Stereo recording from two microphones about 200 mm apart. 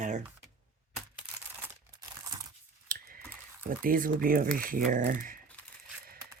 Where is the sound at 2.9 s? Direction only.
45° right (ahead or behind).